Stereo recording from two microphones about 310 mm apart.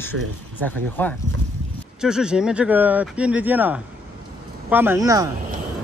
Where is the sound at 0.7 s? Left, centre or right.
Centre.